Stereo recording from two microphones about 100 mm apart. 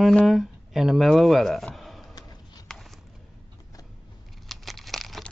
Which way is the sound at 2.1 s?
40° left (ahead or behind).